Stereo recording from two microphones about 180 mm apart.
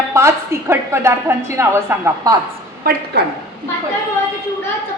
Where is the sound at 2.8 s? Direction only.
55° right (ahead or behind).